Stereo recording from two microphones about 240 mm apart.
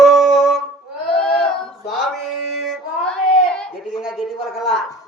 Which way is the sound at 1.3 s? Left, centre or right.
Centre.